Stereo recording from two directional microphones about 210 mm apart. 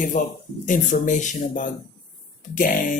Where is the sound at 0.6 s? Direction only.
35° left (ahead or behind).